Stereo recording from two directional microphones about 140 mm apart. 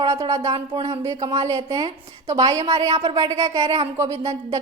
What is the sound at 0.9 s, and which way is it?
Speech, 25° right (ahead or behind).